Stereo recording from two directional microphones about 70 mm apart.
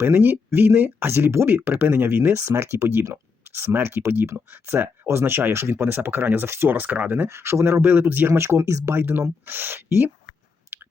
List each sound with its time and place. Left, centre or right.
0.0 s speech: right
7.3 s speech: right
8.3 s speech: right
9.0 s speech: right
10.7 s chewing: right